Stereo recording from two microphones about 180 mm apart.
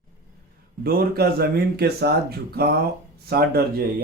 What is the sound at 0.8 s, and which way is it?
Speech, 60° right (ahead or behind).